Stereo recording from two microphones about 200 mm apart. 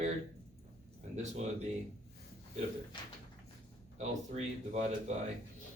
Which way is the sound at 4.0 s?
35° right (ahead or behind).